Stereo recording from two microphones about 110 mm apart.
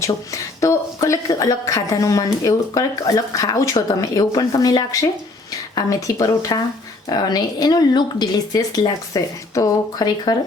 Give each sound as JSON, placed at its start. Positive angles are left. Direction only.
{"t": 0.0, "sound": "speech", "side_deg": 30}